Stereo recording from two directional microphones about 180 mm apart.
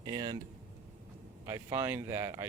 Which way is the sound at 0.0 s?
25° right (ahead or behind).